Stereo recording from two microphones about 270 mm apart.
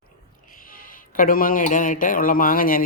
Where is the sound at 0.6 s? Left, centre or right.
Left.